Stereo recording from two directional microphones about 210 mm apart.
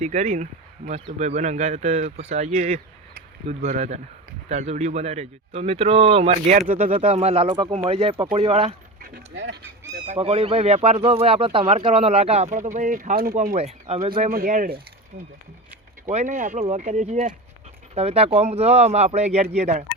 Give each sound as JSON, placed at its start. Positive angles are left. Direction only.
{"t": 0.0, "sound": "speech", "side_deg": -35}
{"t": 7.0, "sound": "speech", "side_deg": -30}
{"t": 9.0, "sound": "vehicle", "side_deg": -45}
{"t": 10.2, "sound": "speech", "side_deg": -25}
{"t": 14.3, "sound": "speech", "side_deg": -40}
{"t": 16.0, "sound": "speech", "side_deg": -35}